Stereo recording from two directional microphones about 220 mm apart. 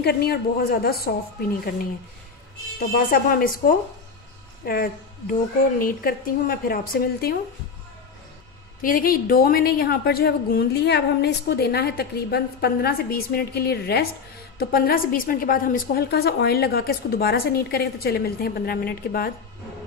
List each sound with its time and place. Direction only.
0.0 s a woman's voice: 45° left (ahead or behind)
3.1 s a woman's voice: 40° left (ahead or behind)
8.8 s a woman's voice: 40° left (ahead or behind)